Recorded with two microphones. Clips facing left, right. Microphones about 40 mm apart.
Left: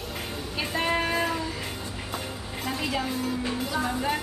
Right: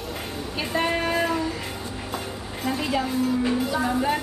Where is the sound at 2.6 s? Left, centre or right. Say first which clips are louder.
Right 4 dB; centre.